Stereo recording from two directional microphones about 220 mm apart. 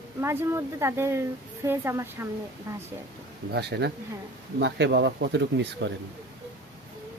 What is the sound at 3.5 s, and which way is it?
Speech, 50° right (ahead or behind).